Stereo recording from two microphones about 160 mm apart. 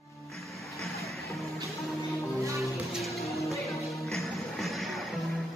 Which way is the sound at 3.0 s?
Centre (ahead or behind).